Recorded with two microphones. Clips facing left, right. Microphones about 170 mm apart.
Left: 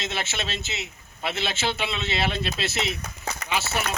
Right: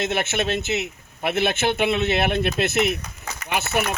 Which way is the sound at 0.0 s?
55° right (ahead or behind).